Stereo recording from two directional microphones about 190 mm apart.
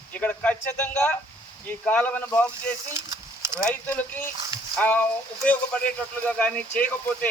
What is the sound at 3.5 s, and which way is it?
Speech, 5° left (ahead or behind).